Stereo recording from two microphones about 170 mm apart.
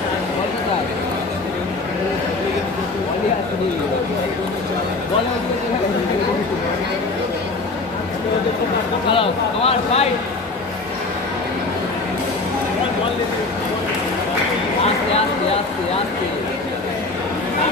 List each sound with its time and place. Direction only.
9.1 s speech: 35° left (ahead or behind)